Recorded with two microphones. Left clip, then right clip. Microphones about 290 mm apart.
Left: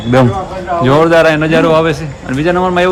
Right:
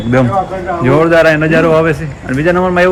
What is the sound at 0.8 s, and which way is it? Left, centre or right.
A man's voice, centre.